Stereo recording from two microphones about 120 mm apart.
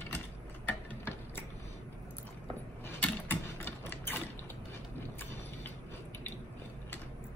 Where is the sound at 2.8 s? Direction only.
15° left (ahead or behind).